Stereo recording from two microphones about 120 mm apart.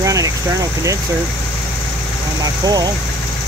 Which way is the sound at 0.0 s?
30° right (ahead or behind).